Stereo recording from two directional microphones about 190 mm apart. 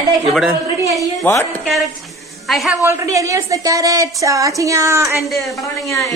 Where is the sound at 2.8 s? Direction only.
15° right (ahead or behind).